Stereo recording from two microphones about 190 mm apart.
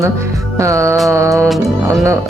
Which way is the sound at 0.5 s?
15° right (ahead or behind).